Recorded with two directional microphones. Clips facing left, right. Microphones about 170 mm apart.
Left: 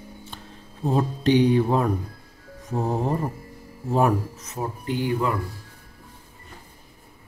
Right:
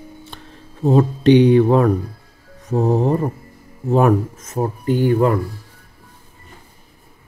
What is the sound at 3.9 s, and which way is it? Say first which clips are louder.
Music: right 6 dB; 70° right (ahead or behind).